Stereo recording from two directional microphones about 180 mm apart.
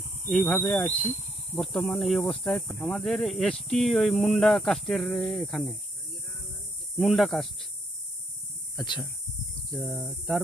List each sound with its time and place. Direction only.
0.3 s speech: 5° left (ahead or behind)
7.0 s speech: centre (ahead or behind)
8.7 s speech: 25° left (ahead or behind)
9.7 s speech: centre (ahead or behind)